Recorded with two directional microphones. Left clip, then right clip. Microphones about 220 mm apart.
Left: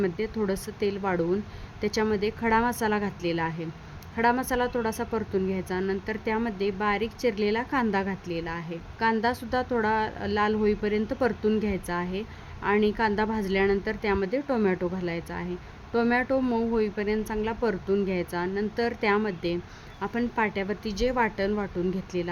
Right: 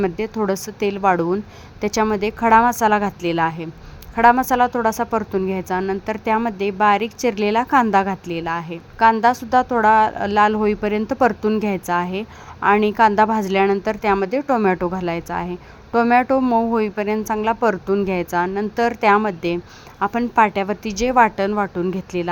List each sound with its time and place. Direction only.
0.0 s a woman's voice: 20° right (ahead or behind)